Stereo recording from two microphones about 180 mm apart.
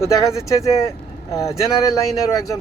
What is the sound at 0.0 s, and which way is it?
Speech, 15° left (ahead or behind).